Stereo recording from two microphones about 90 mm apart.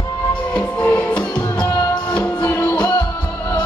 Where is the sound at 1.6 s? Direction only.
45° left (ahead or behind).